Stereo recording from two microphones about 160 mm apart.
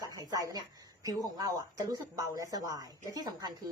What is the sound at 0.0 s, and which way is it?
A woman's voice, 20° right (ahead or behind).